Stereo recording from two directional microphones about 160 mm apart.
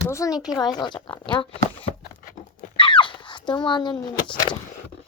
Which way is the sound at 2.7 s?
30° left (ahead or behind).